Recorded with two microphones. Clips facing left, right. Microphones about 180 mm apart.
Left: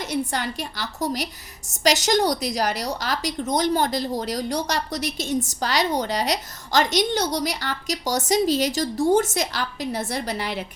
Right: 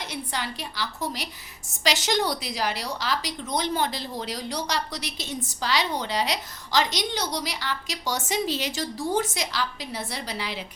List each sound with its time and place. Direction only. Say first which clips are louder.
0.1 s a woman's voice: left 9 dB; 45° left (ahead or behind)